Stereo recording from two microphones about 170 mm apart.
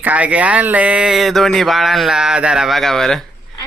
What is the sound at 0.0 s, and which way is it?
Speech, 10° right (ahead or behind).